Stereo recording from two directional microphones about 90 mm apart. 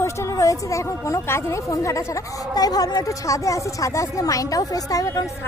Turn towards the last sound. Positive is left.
turn(degrees=40)  # may be behind; listen again after turning